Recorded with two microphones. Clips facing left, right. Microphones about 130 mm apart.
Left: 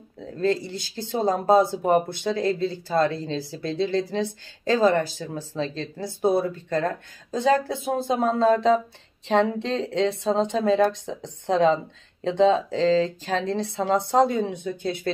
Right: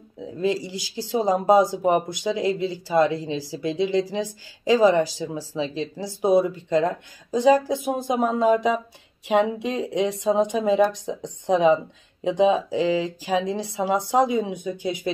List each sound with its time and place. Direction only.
0.2 s a woman's voice: 15° right (ahead or behind)